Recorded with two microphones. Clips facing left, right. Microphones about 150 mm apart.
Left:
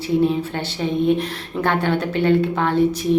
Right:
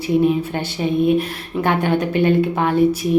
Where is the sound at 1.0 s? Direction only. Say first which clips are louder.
Right 2 dB; 10° right (ahead or behind).